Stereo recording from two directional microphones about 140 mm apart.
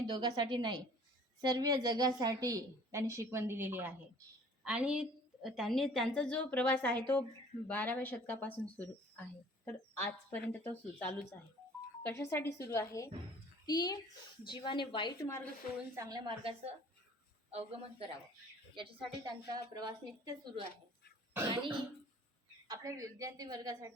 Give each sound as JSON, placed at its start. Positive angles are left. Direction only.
{"t": 0.1, "sound": "a woman's voice", "side_deg": -30}
{"t": 16.0, "sound": "a woman's voice", "side_deg": -30}
{"t": 22.7, "sound": "a woman's voice", "side_deg": -25}